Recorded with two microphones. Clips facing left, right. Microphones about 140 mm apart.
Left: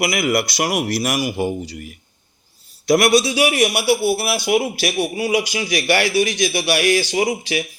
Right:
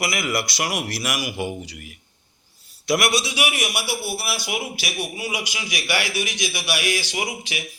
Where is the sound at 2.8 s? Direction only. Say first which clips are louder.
Left 7 dB; 40° left (ahead or behind); by 5.4 s 60° left (ahead or behind).